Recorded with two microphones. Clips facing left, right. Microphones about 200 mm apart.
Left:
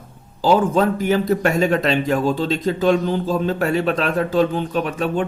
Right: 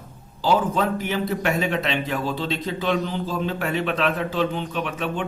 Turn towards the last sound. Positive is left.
turn(degrees=40)  # may be behind; listen again after turning